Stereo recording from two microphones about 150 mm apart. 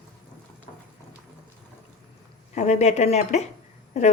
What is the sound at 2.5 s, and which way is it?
Speech, 50° left (ahead or behind).